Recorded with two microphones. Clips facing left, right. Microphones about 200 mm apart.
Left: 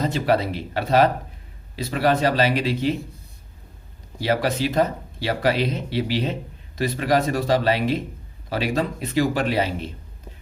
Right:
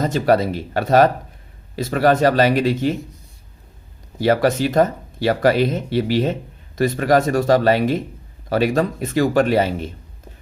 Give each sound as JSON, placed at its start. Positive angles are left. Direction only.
{"t": 0.0, "sound": "speech", "side_deg": -45}
{"t": 4.2, "sound": "speech", "side_deg": -45}